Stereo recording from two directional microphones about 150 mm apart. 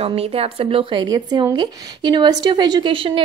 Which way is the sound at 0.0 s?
40° right (ahead or behind).